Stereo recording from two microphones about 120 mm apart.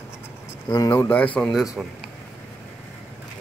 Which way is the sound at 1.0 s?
10° left (ahead or behind).